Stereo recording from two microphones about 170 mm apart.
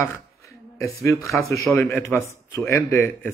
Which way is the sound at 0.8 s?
15° left (ahead or behind).